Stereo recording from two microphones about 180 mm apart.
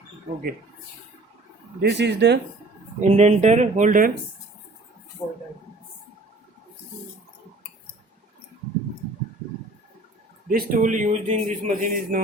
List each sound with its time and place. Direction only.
1.8 s speech: 70° right (ahead or behind)
3.0 s speech: 40° right (ahead or behind)
10.5 s a man's voice: 45° right (ahead or behind)